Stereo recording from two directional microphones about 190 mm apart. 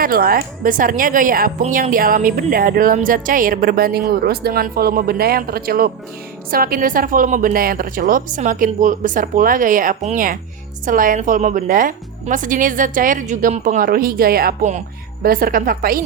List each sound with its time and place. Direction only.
0.0 s a woman's voice: 50° right (ahead or behind)